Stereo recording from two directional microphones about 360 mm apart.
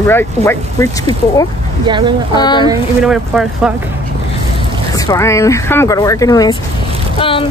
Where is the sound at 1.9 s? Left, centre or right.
Centre.